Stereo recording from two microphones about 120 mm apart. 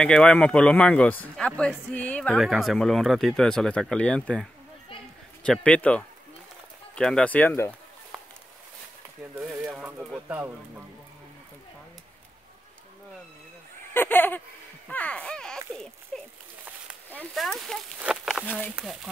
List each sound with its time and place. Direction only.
0.0 s a man's voice: 10° left (ahead or behind)
2.4 s a man's voice: centre (ahead or behind); by 7.7 s 20° left (ahead or behind)
9.3 s speech: 15° right (ahead or behind)
13.9 s a man's voice: 15° left (ahead or behind)
14.9 s a sound: 10° left (ahead or behind)
17.3 s speech: centre (ahead or behind)
18.1 s a sound: 5° right (ahead or behind)